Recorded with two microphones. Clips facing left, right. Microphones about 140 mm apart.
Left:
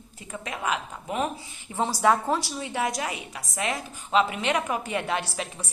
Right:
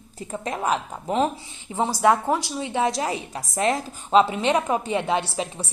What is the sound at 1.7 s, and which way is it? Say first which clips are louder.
A woman's voice: right 3 dB; 15° right (ahead or behind).